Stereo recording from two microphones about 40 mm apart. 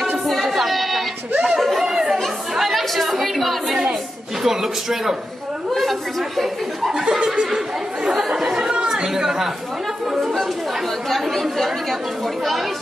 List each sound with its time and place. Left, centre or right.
0.3 s a sound: centre
1.6 s chatter: centre
1.9 s chatter: centre
2.6 s chatter: centre
4.4 s speech: centre
5.8 s a sound: centre
6.9 s speech: right
8.6 s chatter: centre
11.1 s speech: centre